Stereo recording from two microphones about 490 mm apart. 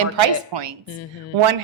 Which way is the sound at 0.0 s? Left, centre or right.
Right.